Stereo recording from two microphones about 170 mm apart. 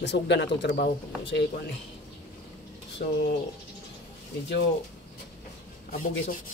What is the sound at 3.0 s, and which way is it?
Speech, 55° left (ahead or behind).